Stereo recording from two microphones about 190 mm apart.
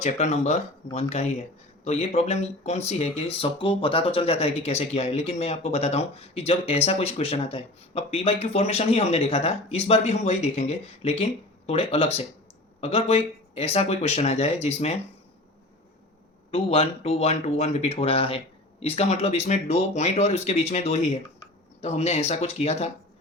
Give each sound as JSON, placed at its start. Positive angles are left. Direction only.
{"t": 0.0, "sound": "speech", "side_deg": 35}
{"t": 16.5, "sound": "speech", "side_deg": 30}